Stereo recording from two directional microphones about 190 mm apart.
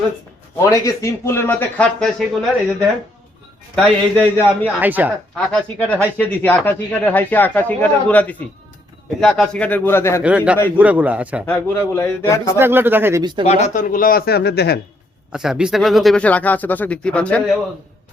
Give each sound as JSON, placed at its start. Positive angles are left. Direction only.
{"t": 0.6, "sound": "speech", "side_deg": 15}
{"t": 3.8, "sound": "speech", "side_deg": 5}
{"t": 4.8, "sound": "speech", "side_deg": -10}
{"t": 5.4, "sound": "speech", "side_deg": 5}
{"t": 10.2, "sound": "speech", "side_deg": -5}
{"t": 11.4, "sound": "speech", "side_deg": 10}
{"t": 12.5, "sound": "speech", "side_deg": -10}
{"t": 13.4, "sound": "speech", "side_deg": 35}
{"t": 15.3, "sound": "speech", "side_deg": -5}